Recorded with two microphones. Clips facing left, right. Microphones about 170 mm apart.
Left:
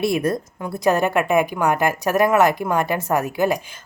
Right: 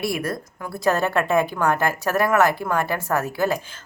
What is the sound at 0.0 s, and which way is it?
A woman's voice, 20° left (ahead or behind).